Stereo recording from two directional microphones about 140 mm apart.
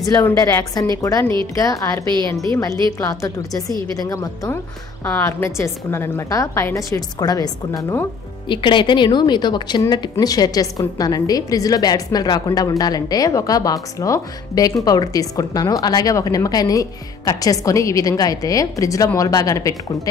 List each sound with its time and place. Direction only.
0.0 s a woman's voice: 20° left (ahead or behind)
3.0 s a woman's voice: 20° left (ahead or behind)
8.5 s a woman's voice: 35° left (ahead or behind)